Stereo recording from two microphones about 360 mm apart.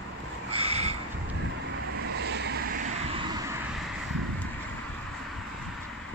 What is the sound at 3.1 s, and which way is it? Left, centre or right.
Vehicle, centre.